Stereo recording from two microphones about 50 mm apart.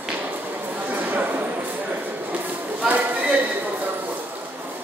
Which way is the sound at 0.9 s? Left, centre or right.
Right.